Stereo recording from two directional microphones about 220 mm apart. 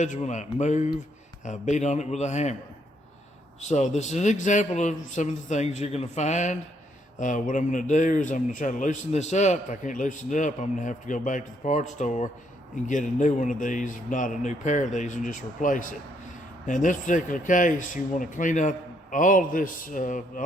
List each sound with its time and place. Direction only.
0.0 s a man's voice: 35° left (ahead or behind)
3.6 s a man's voice: 30° left (ahead or behind)